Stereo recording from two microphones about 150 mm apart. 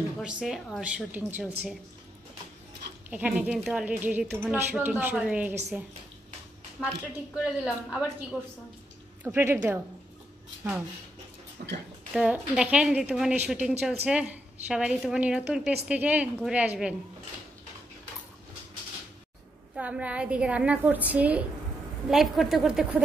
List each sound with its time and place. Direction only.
0.2 s a woman's voice: 5° right (ahead or behind)
3.1 s a woman's voice: 10° right (ahead or behind)
6.8 s a woman's voice: centre (ahead or behind)
9.2 s a woman's voice: 15° right (ahead or behind)
11.6 s speech: 90° right
12.1 s a woman's voice: 5° right (ahead or behind)
19.7 s a woman's voice: 10° right (ahead or behind)